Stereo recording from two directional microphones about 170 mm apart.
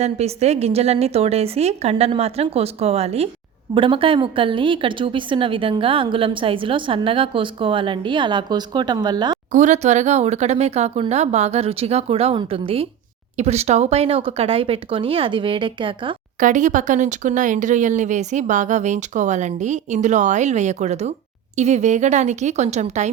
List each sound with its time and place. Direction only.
0.0 s a woman's voice: 40° right (ahead or behind)
9.5 s speech: 45° right (ahead or behind); by 16.1 s 30° right (ahead or behind)
16.4 s speech: 50° right (ahead or behind)